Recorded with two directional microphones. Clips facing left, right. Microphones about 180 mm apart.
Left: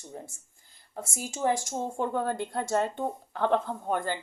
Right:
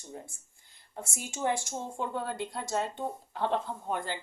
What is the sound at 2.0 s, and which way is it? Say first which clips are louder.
A woman's voice: left 5 dB; 50° left (ahead or behind).